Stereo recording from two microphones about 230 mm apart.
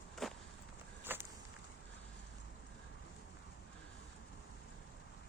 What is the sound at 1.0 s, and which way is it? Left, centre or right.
Walk, centre.